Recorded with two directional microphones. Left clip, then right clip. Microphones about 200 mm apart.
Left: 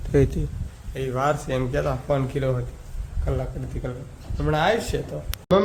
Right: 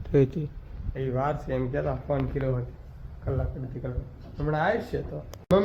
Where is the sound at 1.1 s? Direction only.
15° left (ahead or behind).